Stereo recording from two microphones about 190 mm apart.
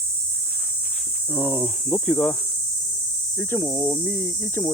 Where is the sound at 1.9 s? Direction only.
5° left (ahead or behind).